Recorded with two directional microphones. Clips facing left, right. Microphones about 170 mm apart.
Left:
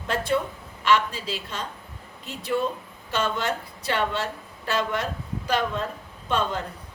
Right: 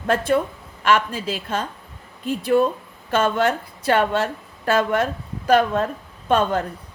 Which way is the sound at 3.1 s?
50° right (ahead or behind).